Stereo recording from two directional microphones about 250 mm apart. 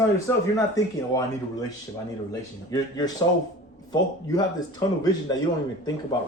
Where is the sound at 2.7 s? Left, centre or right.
Centre.